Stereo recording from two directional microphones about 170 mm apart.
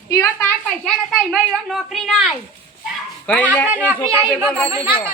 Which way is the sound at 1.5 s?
Centre (ahead or behind).